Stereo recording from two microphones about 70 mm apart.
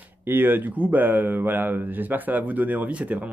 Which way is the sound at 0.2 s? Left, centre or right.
Right.